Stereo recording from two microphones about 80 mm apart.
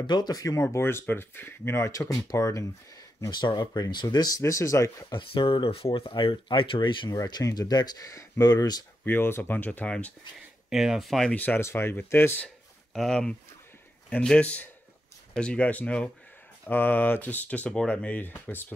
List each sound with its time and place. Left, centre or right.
0.0 s speech: left
0.6 s speech: left
1.9 s speech: left
3.3 s speech: left
4.4 s speech: left
5.1 s speech: left
7.1 s speech: left
9.0 s speech: left
10.7 s speech: centre
11.3 s speech: left
11.6 s speech: left
12.9 s speech: centre; by 18.7 s left